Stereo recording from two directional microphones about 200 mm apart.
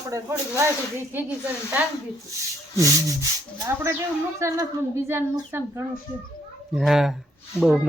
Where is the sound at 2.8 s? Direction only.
15° right (ahead or behind).